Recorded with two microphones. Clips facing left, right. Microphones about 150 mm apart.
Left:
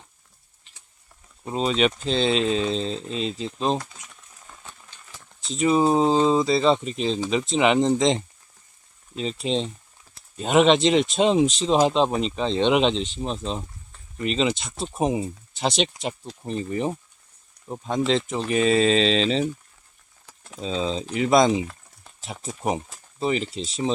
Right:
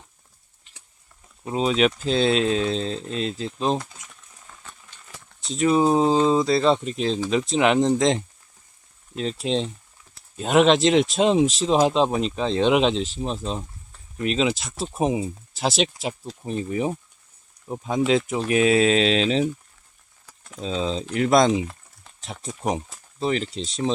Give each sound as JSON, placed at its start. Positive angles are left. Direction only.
{"t": 1.5, "sound": "speech", "side_deg": 0}
{"t": 5.4, "sound": "speech", "side_deg": 0}
{"t": 20.6, "sound": "speech", "side_deg": 0}